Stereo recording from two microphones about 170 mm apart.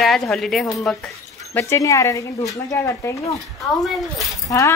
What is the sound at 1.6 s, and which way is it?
Speech, 15° left (ahead or behind).